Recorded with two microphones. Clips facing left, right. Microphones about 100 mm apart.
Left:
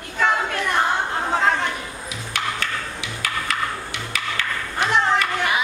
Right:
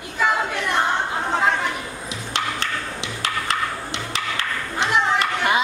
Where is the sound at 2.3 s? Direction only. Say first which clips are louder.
Right 1 dB; 25° right (ahead or behind).